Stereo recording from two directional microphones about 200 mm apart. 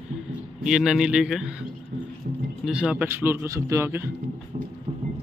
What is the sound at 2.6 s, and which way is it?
A man's voice, 5° right (ahead or behind).